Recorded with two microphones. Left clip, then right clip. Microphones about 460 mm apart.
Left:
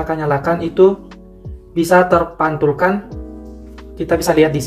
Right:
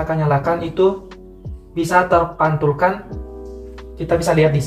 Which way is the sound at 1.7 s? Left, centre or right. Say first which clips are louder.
Left 3 dB; centre.